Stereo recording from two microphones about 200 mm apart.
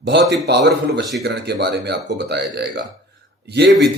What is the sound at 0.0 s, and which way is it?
Speech, 60° right (ahead or behind).